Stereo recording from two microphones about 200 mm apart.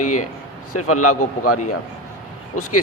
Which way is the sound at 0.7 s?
90° left.